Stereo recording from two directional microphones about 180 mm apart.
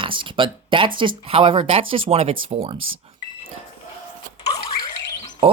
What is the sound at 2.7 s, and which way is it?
Speech, 90° right.